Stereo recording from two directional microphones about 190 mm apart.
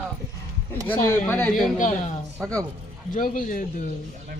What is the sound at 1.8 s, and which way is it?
Speech, 40° left (ahead or behind).